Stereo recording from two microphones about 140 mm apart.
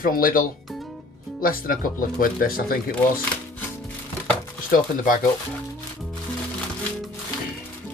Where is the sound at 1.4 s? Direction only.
90° left.